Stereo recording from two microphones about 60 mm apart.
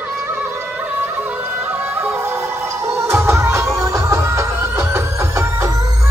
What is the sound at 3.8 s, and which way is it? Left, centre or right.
Music, right.